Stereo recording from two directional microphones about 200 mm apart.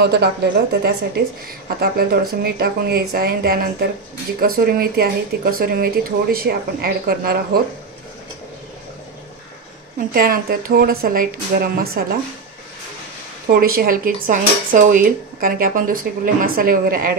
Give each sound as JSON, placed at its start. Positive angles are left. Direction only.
{"t": 0.0, "sound": "a woman's voice", "side_deg": -55}
{"t": 1.8, "sound": "speech", "side_deg": -50}
{"t": 10.1, "sound": "speech", "side_deg": -45}
{"t": 13.5, "sound": "speech", "side_deg": -45}